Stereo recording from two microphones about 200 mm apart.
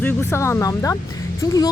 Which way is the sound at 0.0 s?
10° left (ahead or behind).